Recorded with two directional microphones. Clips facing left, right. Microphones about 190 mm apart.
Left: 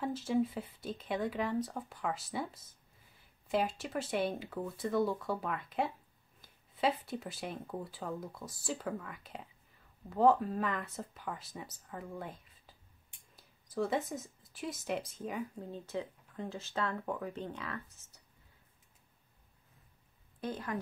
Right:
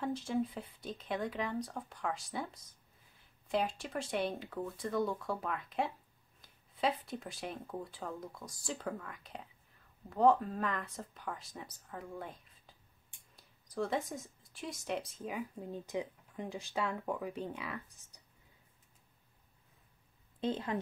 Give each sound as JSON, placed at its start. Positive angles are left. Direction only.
{"t": 0.0, "sound": "speech", "side_deg": 5}
{"t": 15.7, "sound": "speech", "side_deg": -15}
{"t": 20.3, "sound": "a woman's voice", "side_deg": -25}